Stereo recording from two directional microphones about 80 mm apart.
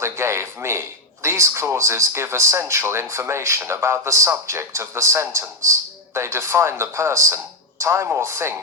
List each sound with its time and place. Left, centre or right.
0.0 s a man's voice: right